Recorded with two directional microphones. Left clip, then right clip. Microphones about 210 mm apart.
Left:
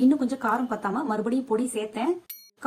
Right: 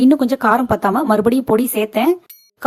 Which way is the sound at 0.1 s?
45° right (ahead or behind).